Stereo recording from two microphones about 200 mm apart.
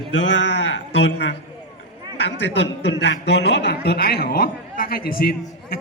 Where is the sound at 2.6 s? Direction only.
60° left (ahead or behind).